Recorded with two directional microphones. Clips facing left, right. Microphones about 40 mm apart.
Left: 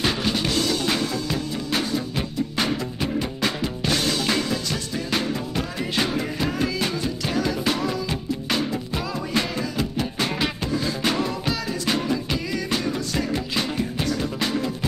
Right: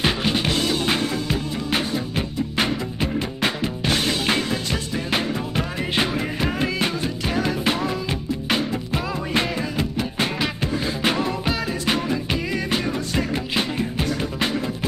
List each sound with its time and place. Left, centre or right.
0.0 s music: right
2.5 s music: right